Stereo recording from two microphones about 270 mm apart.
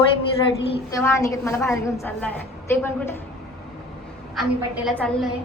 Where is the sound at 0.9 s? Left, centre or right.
Centre.